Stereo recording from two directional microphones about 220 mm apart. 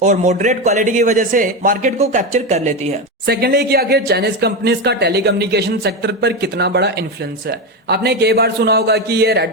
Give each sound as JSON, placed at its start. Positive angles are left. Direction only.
{"t": 0.0, "sound": "a man's voice", "side_deg": -35}
{"t": 3.2, "sound": "speech", "side_deg": -45}